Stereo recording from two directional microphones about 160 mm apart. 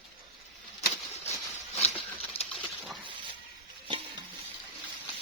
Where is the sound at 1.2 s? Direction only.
40° left (ahead or behind).